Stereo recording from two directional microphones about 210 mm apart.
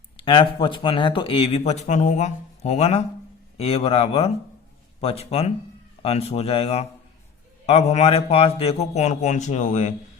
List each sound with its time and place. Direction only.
0.2 s a man's voice: 25° left (ahead or behind)